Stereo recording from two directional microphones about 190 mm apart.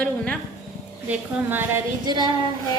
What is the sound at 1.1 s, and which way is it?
Speech, 10° right (ahead or behind).